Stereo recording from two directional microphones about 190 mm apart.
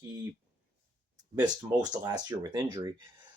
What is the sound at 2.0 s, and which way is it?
Speech, 20° right (ahead or behind).